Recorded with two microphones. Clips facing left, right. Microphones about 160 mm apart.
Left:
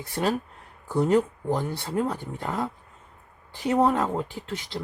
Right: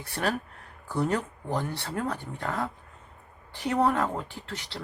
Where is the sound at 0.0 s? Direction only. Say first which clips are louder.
Left 4 dB; 20° left (ahead or behind).